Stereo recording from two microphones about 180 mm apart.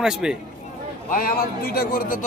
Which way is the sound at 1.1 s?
50° left (ahead or behind).